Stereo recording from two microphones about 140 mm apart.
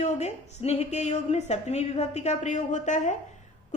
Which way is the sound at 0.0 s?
50° left (ahead or behind).